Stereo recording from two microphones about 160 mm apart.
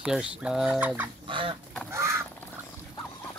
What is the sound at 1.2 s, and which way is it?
Fowl, 30° right (ahead or behind).